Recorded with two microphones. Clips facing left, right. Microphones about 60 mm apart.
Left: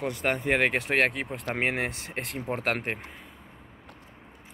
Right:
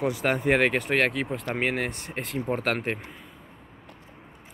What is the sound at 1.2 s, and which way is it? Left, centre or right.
Speech, centre.